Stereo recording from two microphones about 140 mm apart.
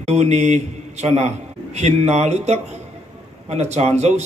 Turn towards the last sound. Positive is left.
turn(degrees=-50)  # may be behind; listen again after turning